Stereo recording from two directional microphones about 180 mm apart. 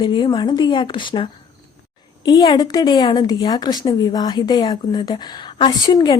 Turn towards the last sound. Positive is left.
turn(degrees=20)  # may be behind; listen again after turning